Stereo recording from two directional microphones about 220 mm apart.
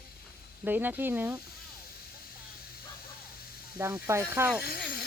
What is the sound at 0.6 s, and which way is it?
Speech, 10° right (ahead or behind).